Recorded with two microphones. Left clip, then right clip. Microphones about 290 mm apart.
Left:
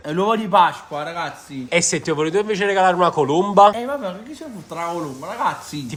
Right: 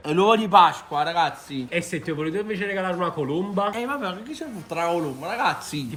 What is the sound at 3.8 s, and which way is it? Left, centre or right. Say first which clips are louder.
Speech: left 3 dB; centre.